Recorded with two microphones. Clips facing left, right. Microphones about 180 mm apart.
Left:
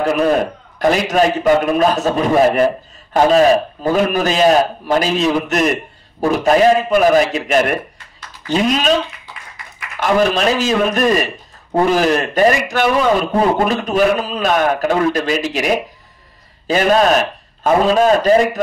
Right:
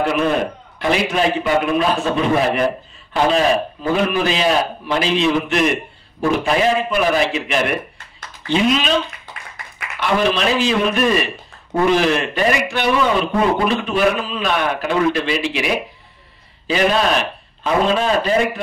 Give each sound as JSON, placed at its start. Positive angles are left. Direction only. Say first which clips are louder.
{"t": 0.0, "sound": "a man's voice", "louder": "left 3 dB", "side_deg": 40}
{"t": 9.9, "sound": "a man's voice", "louder": "left 3 dB", "side_deg": 45}